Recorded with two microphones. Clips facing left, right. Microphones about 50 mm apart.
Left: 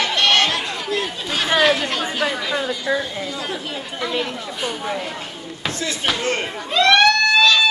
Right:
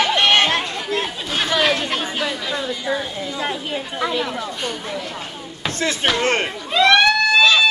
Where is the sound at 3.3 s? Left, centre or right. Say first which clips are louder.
Right 3 dB; right.